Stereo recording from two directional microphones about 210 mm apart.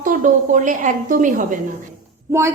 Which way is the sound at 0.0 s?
40° right (ahead or behind).